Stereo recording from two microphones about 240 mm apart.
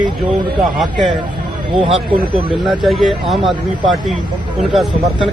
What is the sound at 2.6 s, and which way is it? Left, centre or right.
Speech, centre.